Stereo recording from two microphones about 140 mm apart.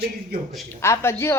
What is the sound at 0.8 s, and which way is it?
Speech, 20° left (ahead or behind).